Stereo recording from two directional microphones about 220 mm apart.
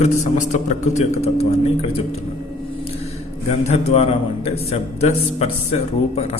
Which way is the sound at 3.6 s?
30° left (ahead or behind).